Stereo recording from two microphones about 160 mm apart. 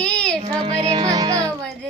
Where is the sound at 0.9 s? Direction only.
25° right (ahead or behind).